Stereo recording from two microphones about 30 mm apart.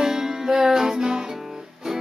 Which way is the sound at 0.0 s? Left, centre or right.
Centre.